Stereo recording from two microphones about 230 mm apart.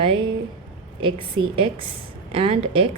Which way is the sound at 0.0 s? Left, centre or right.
Right.